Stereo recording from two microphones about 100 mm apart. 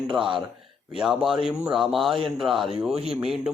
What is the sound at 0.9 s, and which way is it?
A man's voice, 5° right (ahead or behind).